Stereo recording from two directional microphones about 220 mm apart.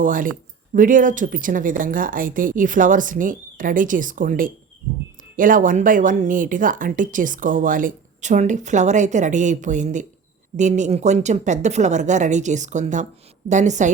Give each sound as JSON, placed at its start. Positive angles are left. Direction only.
{"t": 0.0, "sound": "speech", "side_deg": -35}